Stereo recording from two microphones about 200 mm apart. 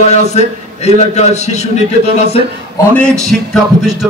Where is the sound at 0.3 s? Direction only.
35° left (ahead or behind).